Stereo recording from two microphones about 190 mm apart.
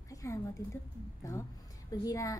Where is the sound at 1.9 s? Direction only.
20° left (ahead or behind).